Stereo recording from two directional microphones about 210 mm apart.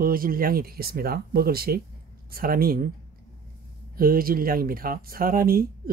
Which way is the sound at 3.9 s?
45° right (ahead or behind).